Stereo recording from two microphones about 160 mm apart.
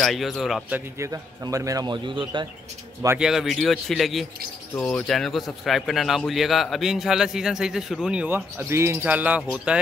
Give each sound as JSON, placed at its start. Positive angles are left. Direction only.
{"t": 0.0, "sound": "speech", "side_deg": 0}
{"t": 0.7, "sound": "a man's voice", "side_deg": -20}
{"t": 3.2, "sound": "speech", "side_deg": 0}